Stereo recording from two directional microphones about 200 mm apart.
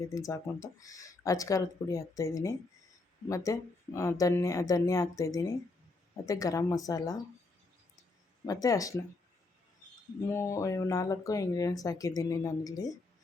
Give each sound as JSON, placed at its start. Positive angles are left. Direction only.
{"t": 0.1, "sound": "speech", "side_deg": 15}
{"t": 8.4, "sound": "speech", "side_deg": 15}
{"t": 10.2, "sound": "speech", "side_deg": 15}